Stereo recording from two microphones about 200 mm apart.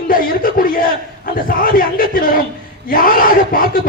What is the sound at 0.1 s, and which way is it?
A man's voice, 45° left (ahead or behind).